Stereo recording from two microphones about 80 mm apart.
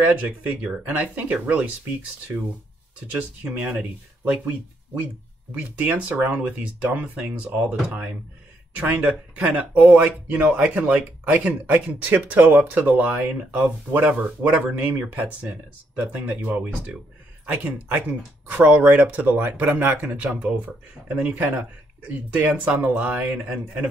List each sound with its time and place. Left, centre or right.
0.0 s speech: centre
3.4 s speech: centre